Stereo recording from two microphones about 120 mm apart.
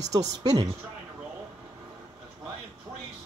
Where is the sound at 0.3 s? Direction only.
35° right (ahead or behind).